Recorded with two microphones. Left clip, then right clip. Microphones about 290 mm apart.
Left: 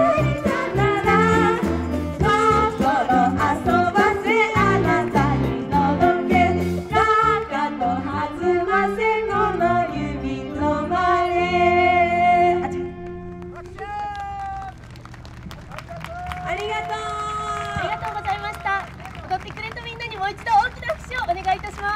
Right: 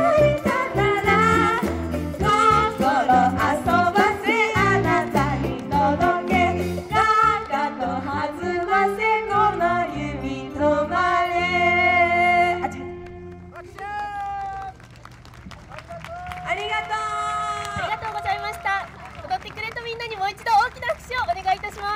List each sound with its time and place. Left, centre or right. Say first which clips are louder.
0.0 s music: right 2 dB; right
13.8 s run: even; right
16.4 s a sound: right 1 dB; right